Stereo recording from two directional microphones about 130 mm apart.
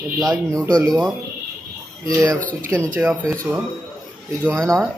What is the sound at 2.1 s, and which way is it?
Speech, 25° right (ahead or behind).